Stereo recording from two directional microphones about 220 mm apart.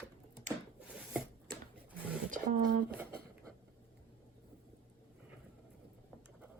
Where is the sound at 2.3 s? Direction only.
35° right (ahead or behind).